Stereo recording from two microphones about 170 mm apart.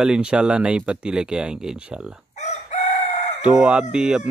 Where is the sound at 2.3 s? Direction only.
40° left (ahead or behind).